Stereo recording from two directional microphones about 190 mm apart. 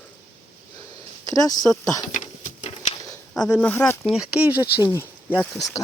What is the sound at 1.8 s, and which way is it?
Speech, 15° left (ahead or behind).